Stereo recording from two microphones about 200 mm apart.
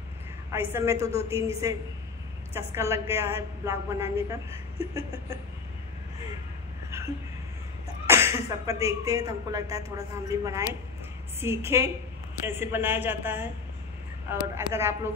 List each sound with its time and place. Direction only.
0.5 s a woman's voice: 10° right (ahead or behind)
8.1 s a woman's voice: 10° right (ahead or behind)